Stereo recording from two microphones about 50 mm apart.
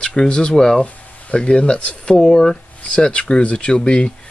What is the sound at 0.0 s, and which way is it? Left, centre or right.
Speech, centre.